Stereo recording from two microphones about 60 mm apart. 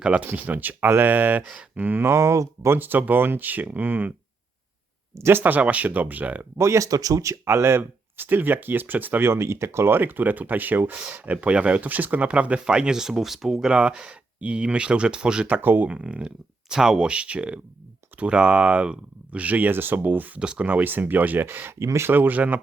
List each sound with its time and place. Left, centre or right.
0.0 s speech: right
2.0 s speech: right
2.7 s speech: right
5.1 s speech: right
5.4 s speech: right
6.6 s speech: right
7.4 s speech: right
9.3 s speech: right; by 15.4 s centre
15.4 s speech: right
15.9 s speech: centre
20.4 s speech: centre; by 21.8 s right
21.8 s speech: right
22.0 s speech: right